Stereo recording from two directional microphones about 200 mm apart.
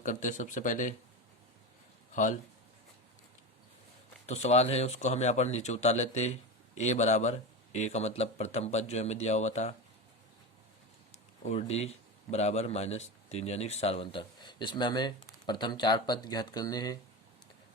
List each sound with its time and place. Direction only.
0.0 s speech: 40° left (ahead or behind)
2.1 s speech: 40° left (ahead or behind)
4.3 s speech: 35° left (ahead or behind)
11.4 s a man's voice: 30° left (ahead or behind)